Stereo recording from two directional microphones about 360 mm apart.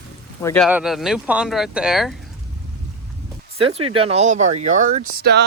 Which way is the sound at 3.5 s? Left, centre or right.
Centre.